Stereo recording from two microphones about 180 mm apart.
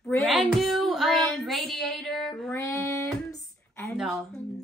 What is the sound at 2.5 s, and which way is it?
Child singing, 15° left (ahead or behind).